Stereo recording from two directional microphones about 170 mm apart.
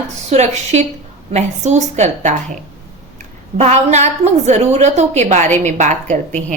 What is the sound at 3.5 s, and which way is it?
A woman's voice, 40° right (ahead or behind).